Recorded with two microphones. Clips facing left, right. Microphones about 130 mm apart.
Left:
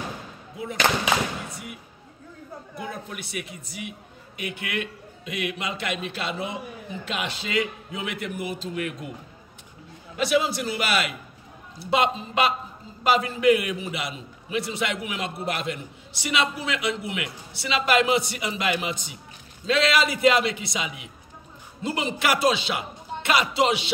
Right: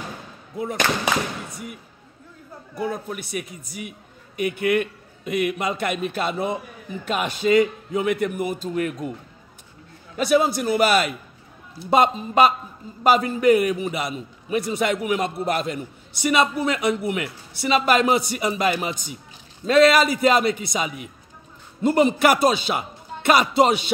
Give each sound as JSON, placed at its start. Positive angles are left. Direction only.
{"t": 0.6, "sound": "a man's voice", "side_deg": -45}
{"t": 2.8, "sound": "a man's voice", "side_deg": -40}
{"t": 10.1, "sound": "a man's voice", "side_deg": -45}